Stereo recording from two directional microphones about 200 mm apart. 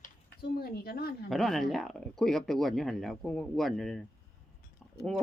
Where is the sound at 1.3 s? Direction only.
Centre (ahead or behind).